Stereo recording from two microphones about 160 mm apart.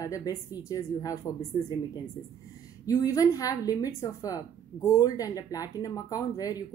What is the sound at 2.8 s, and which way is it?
A woman's voice, 20° left (ahead or behind).